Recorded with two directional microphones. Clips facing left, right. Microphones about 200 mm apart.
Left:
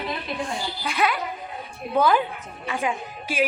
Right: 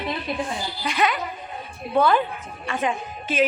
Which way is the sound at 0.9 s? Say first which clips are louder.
Right 1 dB; centre (ahead or behind).